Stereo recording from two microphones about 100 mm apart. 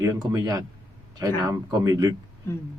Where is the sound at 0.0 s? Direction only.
35° right (ahead or behind).